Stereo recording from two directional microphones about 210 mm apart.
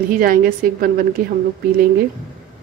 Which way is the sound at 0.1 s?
45° right (ahead or behind).